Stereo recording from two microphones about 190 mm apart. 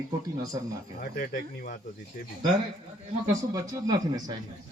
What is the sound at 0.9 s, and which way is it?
Speech, 50° left (ahead or behind).